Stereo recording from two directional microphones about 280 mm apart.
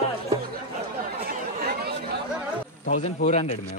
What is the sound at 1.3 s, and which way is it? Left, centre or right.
Chatter, right.